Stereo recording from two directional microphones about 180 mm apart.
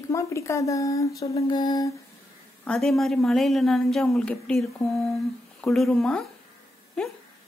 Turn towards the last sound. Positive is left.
turn(degrees=5)  # may be behind; listen again after turning